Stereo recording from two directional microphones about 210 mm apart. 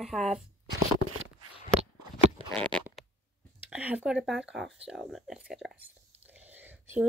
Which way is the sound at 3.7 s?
5° right (ahead or behind).